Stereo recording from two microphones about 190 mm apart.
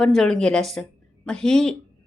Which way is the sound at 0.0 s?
5° left (ahead or behind).